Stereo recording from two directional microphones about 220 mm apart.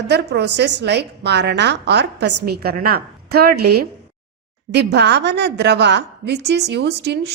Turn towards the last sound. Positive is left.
turn(degrees=-50)  # may be behind; listen again after turning